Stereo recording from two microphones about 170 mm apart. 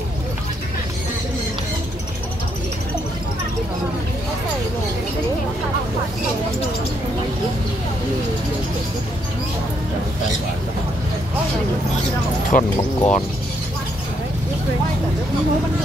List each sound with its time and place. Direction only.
12.4 s speech: 50° left (ahead or behind)